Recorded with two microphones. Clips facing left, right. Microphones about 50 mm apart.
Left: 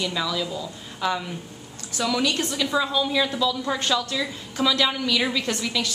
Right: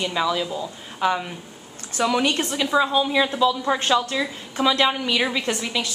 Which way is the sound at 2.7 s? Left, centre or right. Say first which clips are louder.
Right 5 dB; right.